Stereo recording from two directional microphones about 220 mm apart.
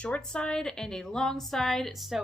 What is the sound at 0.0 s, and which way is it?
A woman's voice, 5° left (ahead or behind).